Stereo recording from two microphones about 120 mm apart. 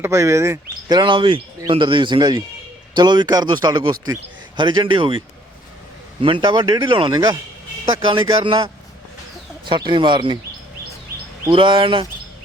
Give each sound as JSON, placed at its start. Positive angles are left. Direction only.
{"t": 0.0, "sound": "speech", "side_deg": -25}
{"t": 0.9, "sound": "speech", "side_deg": -40}
{"t": 6.2, "sound": "speech", "side_deg": -40}
{"t": 11.4, "sound": "speech", "side_deg": -40}